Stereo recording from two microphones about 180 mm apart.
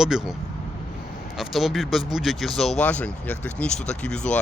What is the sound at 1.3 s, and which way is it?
Speech, centre (ahead or behind).